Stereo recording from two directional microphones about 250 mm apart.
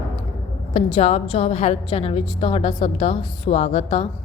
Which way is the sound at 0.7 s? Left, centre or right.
Left.